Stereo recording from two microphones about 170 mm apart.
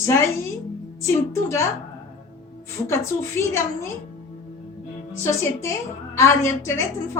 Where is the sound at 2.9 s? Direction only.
15° left (ahead or behind).